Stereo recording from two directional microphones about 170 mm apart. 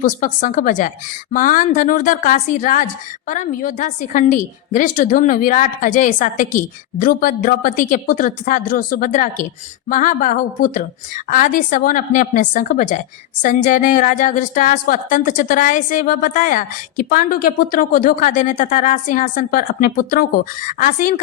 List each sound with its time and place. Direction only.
0.0 s a woman's voice: 50° left (ahead or behind)